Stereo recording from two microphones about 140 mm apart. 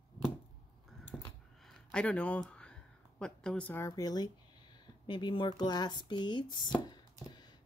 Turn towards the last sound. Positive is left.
turn(degrees=30)  # may be behind; listen again after turning